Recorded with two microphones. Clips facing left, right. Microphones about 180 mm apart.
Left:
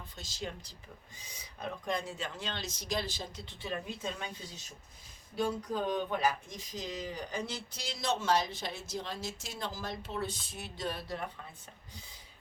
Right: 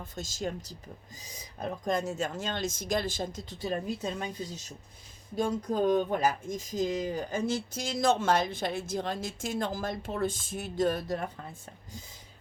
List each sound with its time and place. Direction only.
0.0 s speech: 45° right (ahead or behind)